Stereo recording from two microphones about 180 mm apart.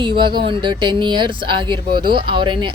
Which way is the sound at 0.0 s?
25° right (ahead or behind).